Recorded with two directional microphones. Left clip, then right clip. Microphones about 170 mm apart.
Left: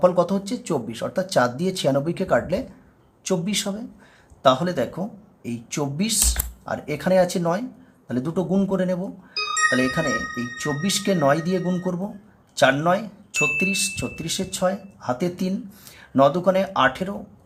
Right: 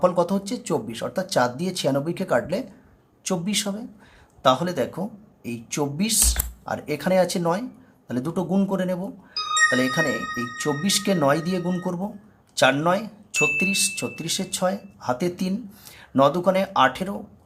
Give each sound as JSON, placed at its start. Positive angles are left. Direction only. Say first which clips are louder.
{"t": 0.0, "sound": "speech", "louder": "left 2 dB", "side_deg": 5}